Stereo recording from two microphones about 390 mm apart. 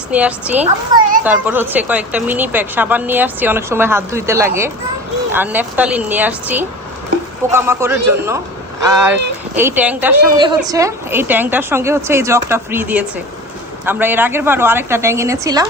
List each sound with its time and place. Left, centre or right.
0.1 s speech: centre
0.6 s speech: centre
1.2 s a man's voice: centre